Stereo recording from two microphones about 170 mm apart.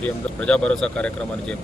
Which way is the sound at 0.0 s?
5° left (ahead or behind).